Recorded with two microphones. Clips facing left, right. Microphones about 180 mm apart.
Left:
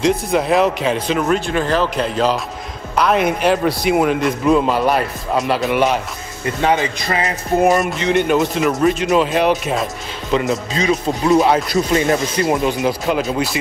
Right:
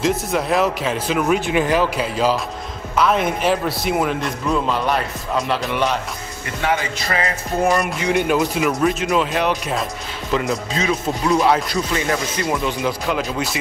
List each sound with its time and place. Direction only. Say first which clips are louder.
0.0 s speech: left 3 dB; centre (ahead or behind)
6.4 s speech: left 5 dB; 20° left (ahead or behind)
7.6 s speech: left 2 dB; centre (ahead or behind)
12.1 s speech: left 5 dB; 25° left (ahead or behind)